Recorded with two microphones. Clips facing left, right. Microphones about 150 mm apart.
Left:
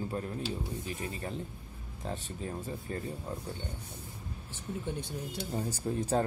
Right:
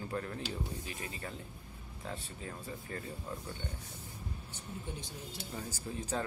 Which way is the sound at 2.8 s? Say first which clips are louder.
Left 5 dB; 25° left (ahead or behind).